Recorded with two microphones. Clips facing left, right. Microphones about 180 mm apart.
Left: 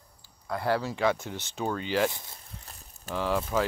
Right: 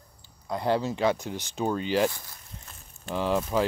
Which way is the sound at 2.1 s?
20° left (ahead or behind).